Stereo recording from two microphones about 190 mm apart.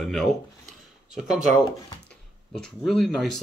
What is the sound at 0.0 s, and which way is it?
Speech, centre (ahead or behind).